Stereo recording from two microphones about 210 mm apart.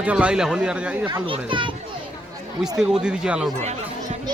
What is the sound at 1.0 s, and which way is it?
Speech, 25° right (ahead or behind).